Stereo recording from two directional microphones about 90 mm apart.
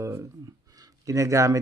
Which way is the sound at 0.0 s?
35° right (ahead or behind).